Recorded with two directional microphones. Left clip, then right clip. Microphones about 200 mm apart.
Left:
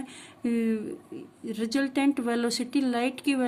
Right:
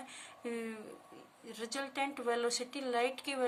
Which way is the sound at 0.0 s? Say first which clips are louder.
Left 9 dB; 30° left (ahead or behind).